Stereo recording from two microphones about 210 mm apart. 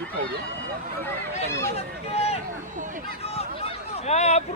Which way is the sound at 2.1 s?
30° left (ahead or behind).